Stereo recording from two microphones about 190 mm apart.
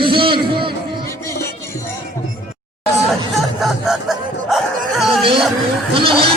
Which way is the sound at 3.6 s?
Centre (ahead or behind).